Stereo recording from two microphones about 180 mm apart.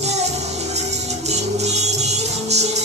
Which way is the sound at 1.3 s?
40° right (ahead or behind).